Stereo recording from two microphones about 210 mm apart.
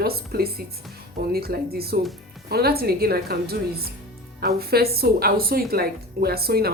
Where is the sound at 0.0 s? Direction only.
45° right (ahead or behind).